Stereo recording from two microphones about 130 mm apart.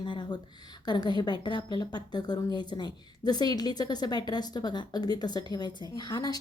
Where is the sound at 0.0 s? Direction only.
35° left (ahead or behind).